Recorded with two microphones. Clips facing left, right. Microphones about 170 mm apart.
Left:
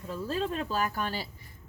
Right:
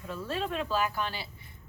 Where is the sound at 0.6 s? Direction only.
40° left (ahead or behind).